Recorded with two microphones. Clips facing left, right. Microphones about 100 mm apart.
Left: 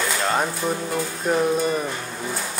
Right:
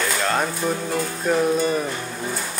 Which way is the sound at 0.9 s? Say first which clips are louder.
Right 1 dB; 10° left (ahead or behind).